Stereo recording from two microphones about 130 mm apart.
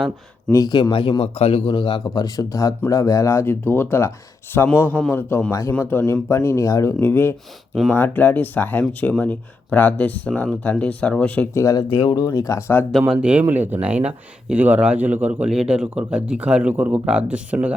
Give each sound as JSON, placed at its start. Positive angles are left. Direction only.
{"t": 0.5, "sound": "a man's voice", "side_deg": 30}
{"t": 11.5, "sound": "speech", "side_deg": 25}
{"t": 12.9, "sound": "a man's voice", "side_deg": -5}